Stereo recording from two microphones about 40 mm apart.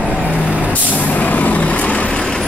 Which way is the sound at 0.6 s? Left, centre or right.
Left.